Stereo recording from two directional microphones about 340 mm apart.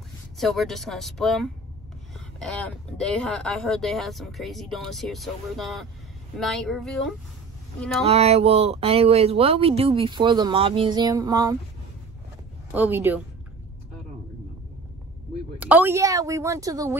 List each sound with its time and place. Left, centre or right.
0.4 s speech: centre
8.0 s speech: centre
12.7 s speech: centre
15.5 s speech: centre